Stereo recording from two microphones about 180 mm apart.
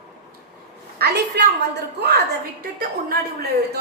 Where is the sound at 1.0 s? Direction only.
65° right (ahead or behind).